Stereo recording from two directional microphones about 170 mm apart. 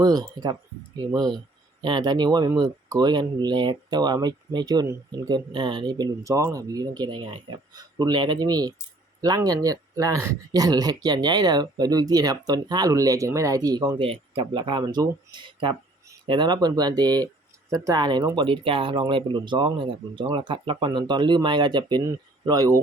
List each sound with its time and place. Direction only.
0.0 s speech: 20° right (ahead or behind)
14.0 s speech: 30° right (ahead or behind)